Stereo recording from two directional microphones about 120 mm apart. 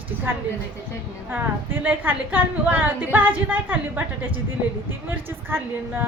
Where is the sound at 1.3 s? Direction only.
15° right (ahead or behind).